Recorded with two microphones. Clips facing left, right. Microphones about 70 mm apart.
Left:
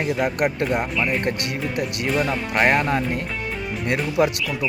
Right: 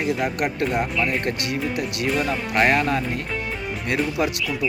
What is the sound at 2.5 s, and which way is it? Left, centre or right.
Speech, left.